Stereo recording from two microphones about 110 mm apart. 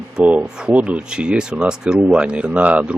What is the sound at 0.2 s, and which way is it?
Speech, 10° right (ahead or behind).